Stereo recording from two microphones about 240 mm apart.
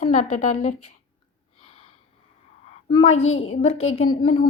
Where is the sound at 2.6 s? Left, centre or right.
Left.